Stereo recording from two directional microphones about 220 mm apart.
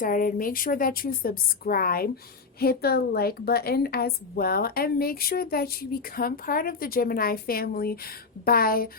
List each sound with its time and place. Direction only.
0.0 s a woman's voice: 40° left (ahead or behind)